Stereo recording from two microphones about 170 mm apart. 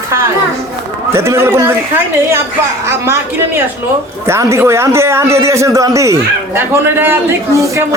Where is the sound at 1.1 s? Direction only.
15° right (ahead or behind).